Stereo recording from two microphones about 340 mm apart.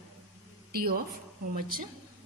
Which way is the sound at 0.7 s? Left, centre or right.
Right.